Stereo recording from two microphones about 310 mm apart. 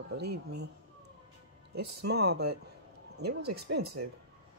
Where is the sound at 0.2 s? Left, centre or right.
Right.